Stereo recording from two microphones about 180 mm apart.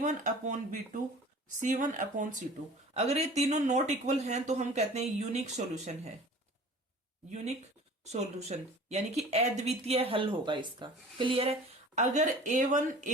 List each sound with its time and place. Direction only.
0.0 s speech: 40° right (ahead or behind)
7.3 s speech: 40° right (ahead or behind)
11.9 s speech: 40° right (ahead or behind)